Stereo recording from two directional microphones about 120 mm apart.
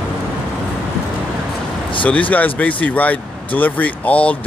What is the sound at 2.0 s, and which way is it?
Speech, 10° left (ahead or behind).